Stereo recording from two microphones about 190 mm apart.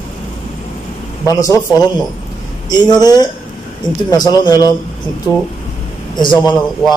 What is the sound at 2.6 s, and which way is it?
A man's voice, 20° left (ahead or behind).